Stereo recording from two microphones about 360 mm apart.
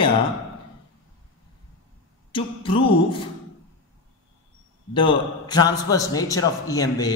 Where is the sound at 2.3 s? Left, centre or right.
Centre.